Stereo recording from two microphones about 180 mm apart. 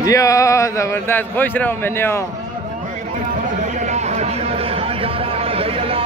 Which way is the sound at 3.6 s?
40° right (ahead or behind).